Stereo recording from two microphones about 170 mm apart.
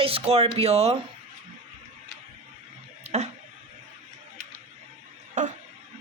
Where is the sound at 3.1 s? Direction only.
40° right (ahead or behind).